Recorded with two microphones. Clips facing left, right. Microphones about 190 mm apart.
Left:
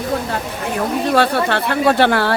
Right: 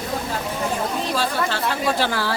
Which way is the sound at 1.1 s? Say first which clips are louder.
Left 11 dB; 65° left (ahead or behind).